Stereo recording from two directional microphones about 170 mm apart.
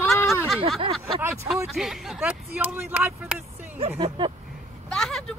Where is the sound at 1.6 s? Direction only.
Centre (ahead or behind).